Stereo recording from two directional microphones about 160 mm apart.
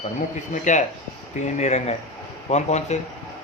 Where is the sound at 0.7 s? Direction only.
50° left (ahead or behind).